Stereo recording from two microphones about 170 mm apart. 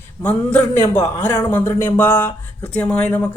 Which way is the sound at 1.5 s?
10° left (ahead or behind).